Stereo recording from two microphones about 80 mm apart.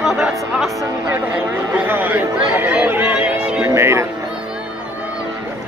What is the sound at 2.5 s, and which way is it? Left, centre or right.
Chatter, centre.